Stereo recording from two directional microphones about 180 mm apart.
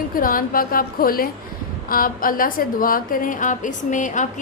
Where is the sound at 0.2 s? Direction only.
50° left (ahead or behind).